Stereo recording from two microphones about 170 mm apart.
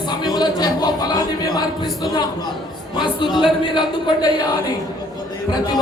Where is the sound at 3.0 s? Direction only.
25° left (ahead or behind).